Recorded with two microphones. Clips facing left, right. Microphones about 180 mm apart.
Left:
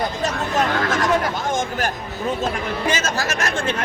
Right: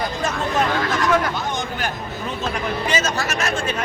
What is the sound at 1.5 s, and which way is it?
Speech, 45° left (ahead or behind).